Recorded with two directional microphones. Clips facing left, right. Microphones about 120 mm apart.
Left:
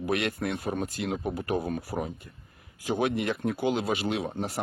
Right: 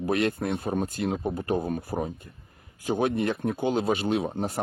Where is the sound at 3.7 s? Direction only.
45° right (ahead or behind).